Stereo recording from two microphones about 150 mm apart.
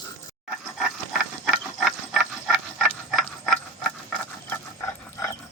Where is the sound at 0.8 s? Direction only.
Centre (ahead or behind).